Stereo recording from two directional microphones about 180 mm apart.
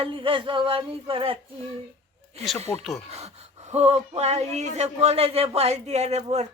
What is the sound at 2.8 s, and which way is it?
Speech, centre (ahead or behind).